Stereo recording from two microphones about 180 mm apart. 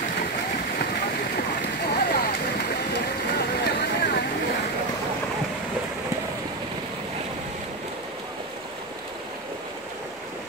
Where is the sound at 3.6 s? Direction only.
60° left (ahead or behind).